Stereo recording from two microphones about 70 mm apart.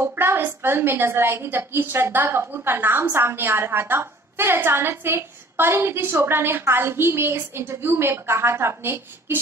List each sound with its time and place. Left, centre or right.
0.0 s a woman's voice: right